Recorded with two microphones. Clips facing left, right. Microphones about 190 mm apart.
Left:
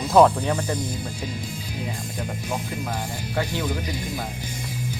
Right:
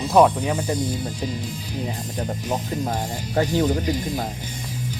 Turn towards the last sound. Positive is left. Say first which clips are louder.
# right 7 dB
turn(degrees=-40)  # may be behind; listen again after turning